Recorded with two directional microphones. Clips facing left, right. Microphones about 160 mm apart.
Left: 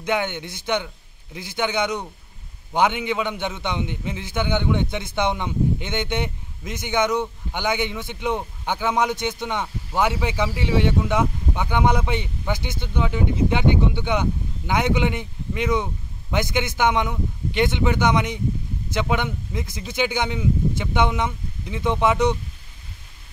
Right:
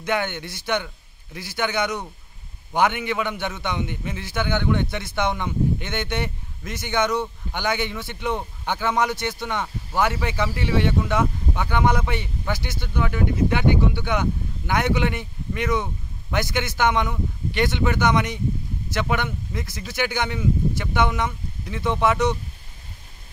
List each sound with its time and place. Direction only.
0.0 s speech: 15° left (ahead or behind)